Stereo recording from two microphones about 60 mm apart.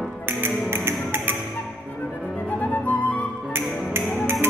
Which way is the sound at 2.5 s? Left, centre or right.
Left.